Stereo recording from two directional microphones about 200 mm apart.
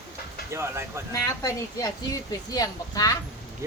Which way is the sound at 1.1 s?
15° left (ahead or behind).